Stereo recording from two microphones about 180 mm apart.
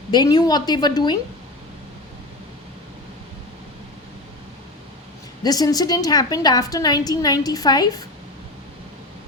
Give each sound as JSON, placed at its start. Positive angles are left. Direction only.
{"t": 0.1, "sound": "a woman's voice", "side_deg": 25}
{"t": 5.4, "sound": "a woman's voice", "side_deg": 20}